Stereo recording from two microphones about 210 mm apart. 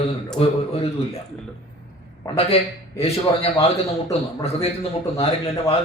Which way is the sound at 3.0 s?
30° left (ahead or behind).